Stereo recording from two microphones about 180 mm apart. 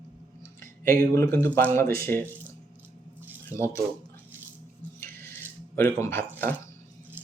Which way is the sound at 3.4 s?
15° left (ahead or behind).